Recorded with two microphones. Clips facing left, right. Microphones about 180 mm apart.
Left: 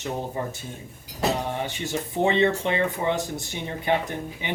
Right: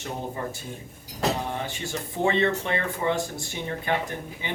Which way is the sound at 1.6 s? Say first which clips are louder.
Left 3 dB; 20° left (ahead or behind).